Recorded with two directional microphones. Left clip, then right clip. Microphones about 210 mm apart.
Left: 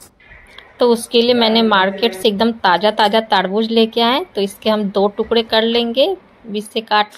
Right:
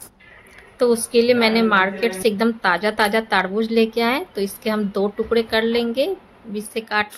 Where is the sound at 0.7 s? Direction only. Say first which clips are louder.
Left 4 dB; 10° left (ahead or behind).